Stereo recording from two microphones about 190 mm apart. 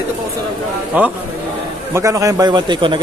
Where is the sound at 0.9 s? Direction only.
10° right (ahead or behind).